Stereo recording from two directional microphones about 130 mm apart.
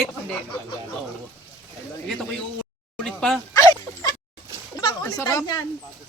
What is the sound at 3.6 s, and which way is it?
Bow-wow, 30° left (ahead or behind).